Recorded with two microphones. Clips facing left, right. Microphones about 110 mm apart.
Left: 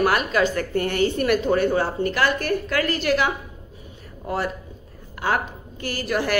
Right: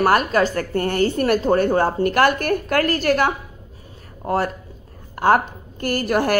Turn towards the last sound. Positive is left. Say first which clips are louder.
# right 5 dB
turn(degrees=-50)  # may be behind; listen again after turning